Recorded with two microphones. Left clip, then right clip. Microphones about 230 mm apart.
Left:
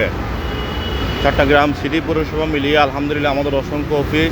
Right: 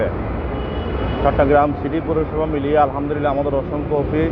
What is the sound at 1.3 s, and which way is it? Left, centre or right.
Speech, left.